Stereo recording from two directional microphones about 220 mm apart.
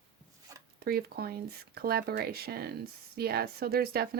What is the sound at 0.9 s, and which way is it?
Speech, 45° right (ahead or behind).